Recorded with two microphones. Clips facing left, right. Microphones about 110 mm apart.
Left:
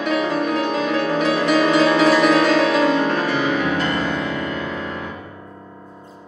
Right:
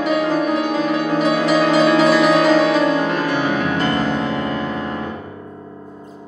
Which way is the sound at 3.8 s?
35° right (ahead or behind).